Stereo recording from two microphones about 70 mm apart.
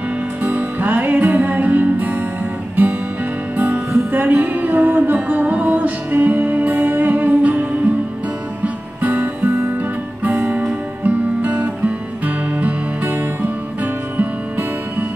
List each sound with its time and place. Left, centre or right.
0.4 s music: right
9.5 s music: right
10.2 s guitar: right
12.5 s music: right